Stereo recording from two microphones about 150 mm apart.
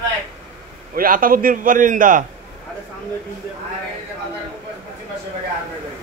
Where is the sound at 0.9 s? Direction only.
70° right (ahead or behind).